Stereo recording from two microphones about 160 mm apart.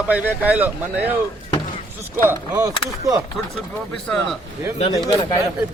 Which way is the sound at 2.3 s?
20° right (ahead or behind).